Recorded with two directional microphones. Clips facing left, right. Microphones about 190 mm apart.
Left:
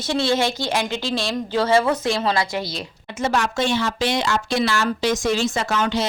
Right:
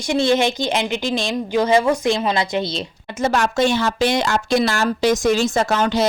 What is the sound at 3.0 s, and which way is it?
Speech, 40° right (ahead or behind).